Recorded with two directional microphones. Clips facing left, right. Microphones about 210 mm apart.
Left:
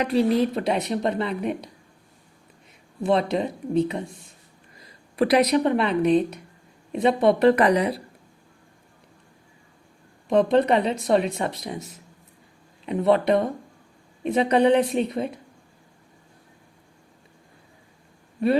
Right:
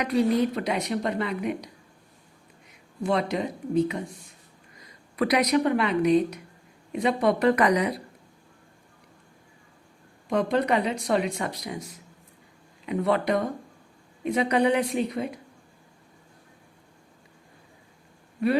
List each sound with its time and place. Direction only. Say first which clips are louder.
0.0 s speech: left 2 dB; 30° left (ahead or behind)
3.0 s speech: left 4 dB; 25° left (ahead or behind)
5.1 s speech: left 3 dB; 30° left (ahead or behind)
10.2 s speech: left 5 dB; 25° left (ahead or behind)